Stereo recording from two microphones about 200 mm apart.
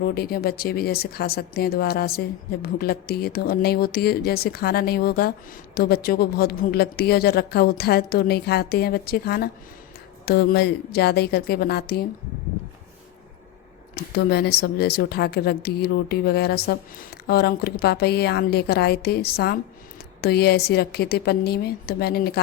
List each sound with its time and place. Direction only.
0.0 s speech: 50° left (ahead or behind)
13.9 s speech: 55° left (ahead or behind)